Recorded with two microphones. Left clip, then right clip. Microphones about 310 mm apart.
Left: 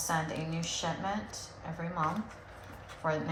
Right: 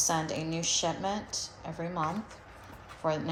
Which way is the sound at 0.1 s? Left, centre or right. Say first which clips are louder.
Right 2 dB; centre.